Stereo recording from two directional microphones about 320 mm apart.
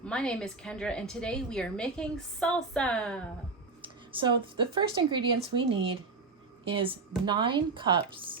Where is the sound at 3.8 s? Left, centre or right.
Centre.